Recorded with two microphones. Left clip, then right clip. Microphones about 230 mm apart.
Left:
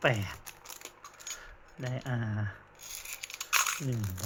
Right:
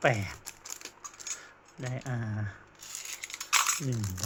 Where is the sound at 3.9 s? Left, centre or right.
Centre.